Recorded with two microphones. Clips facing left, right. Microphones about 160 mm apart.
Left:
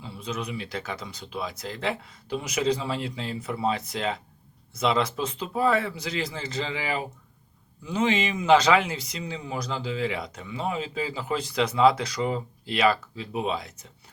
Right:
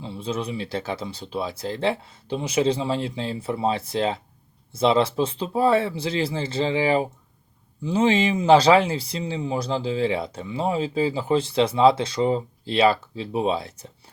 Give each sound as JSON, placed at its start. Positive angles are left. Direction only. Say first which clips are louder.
{"t": 0.0, "sound": "speech", "louder": "right 5 dB", "side_deg": -30}